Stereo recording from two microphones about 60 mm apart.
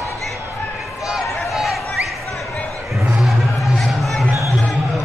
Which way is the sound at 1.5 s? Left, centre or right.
Centre.